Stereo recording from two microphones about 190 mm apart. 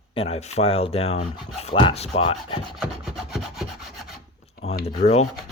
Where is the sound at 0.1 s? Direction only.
30° left (ahead or behind).